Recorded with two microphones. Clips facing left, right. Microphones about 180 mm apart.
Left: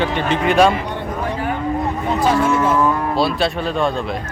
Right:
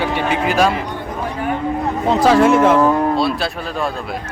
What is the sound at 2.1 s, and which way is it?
Speech, 90° right.